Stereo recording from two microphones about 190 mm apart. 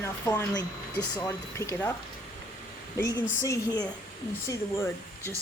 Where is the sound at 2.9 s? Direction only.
15° left (ahead or behind).